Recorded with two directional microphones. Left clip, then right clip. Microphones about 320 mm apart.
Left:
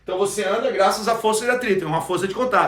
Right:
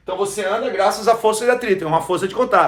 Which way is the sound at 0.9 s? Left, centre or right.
Centre.